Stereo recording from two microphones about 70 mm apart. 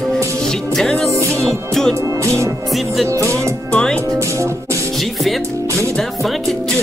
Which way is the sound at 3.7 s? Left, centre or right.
Centre.